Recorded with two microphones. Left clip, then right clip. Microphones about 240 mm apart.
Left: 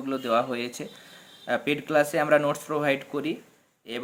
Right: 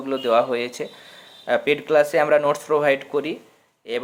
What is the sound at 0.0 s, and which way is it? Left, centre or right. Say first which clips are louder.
Speech: right 6 dB; centre.